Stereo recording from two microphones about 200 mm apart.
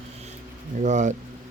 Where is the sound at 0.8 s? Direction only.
35° right (ahead or behind).